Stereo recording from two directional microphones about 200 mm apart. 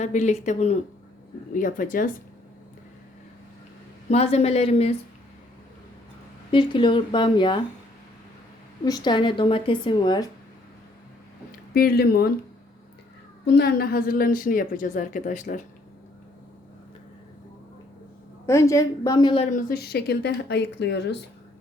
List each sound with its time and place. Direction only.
0.0 s a woman's voice: 35° left (ahead or behind)
4.1 s speech: 30° left (ahead or behind)
6.5 s speech: 25° left (ahead or behind)
8.8 s speech: 20° left (ahead or behind)
11.7 s a woman's voice: 50° left (ahead or behind)
13.4 s a woman's voice: 55° left (ahead or behind); by 15.6 s 40° left (ahead or behind)
18.4 s a woman's voice: 15° left (ahead or behind)
19.5 s speech: 45° left (ahead or behind)